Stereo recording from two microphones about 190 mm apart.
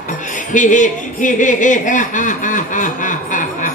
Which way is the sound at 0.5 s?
40° left (ahead or behind).